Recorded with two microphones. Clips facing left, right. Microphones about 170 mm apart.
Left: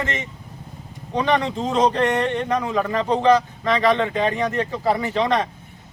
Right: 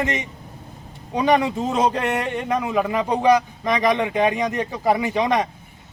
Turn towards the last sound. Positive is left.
turn(degrees=-15)  # may be behind; listen again after turning